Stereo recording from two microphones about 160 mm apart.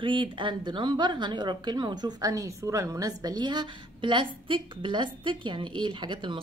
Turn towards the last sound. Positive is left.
turn(degrees=-30)  # may be behind; listen again after turning